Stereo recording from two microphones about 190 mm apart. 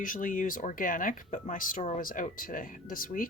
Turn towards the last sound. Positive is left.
turn(degrees=45)  # may be behind; listen again after turning